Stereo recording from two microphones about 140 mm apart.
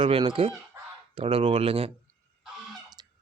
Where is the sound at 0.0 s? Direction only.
35° right (ahead or behind).